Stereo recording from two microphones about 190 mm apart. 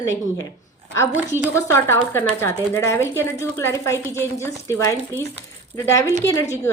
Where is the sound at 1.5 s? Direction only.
15° left (ahead or behind).